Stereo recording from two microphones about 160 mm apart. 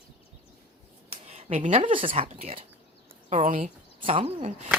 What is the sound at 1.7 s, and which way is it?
Speech, 35° right (ahead or behind).